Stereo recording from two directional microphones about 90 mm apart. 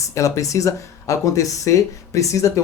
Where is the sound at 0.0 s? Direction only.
35° left (ahead or behind).